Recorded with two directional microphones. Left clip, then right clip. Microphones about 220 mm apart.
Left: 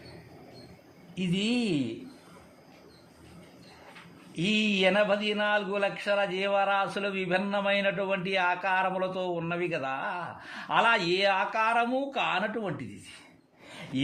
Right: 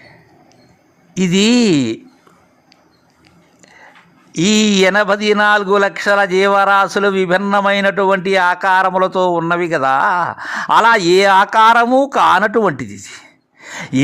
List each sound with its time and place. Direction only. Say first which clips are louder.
1.1 s speech: right 17 dB; 45° right (ahead or behind)
4.4 s speech: right 14 dB; 40° right (ahead or behind)